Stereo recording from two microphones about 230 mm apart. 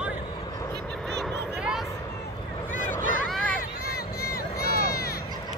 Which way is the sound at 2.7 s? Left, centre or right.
Left.